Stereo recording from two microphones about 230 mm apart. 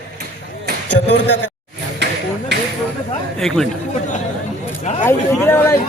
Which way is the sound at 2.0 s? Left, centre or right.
Right.